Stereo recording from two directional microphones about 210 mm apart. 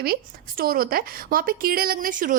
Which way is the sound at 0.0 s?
45° right (ahead or behind).